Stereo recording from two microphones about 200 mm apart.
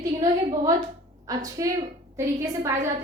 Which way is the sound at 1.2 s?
15° right (ahead or behind).